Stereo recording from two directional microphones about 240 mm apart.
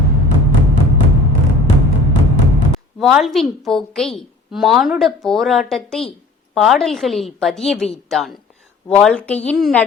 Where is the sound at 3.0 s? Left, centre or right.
Centre.